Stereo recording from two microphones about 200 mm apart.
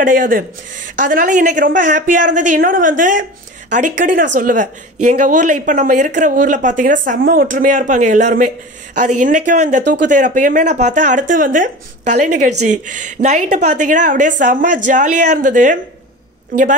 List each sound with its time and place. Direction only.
0.0 s speech: 40° right (ahead or behind)
10.8 s speech: 35° right (ahead or behind)